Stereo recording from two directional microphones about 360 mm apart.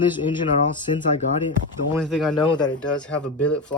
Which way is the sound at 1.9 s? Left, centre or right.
Centre.